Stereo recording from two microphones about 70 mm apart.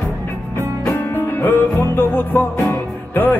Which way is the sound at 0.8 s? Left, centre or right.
Left.